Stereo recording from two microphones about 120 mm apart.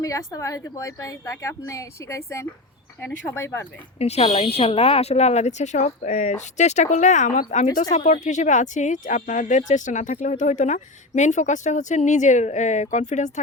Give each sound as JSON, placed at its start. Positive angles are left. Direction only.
{"t": 0.0, "sound": "a woman's voice", "side_deg": 25}
{"t": 3.9, "sound": "speech", "side_deg": 65}